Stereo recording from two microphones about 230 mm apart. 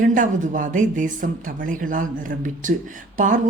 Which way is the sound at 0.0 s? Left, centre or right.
Right.